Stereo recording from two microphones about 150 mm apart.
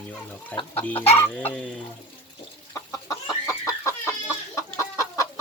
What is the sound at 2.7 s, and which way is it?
Chicken, 20° left (ahead or behind).